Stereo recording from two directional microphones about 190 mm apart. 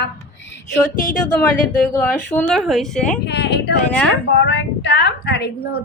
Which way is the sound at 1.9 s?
10° left (ahead or behind).